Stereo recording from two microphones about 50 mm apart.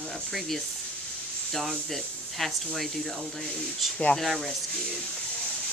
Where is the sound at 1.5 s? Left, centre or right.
Centre.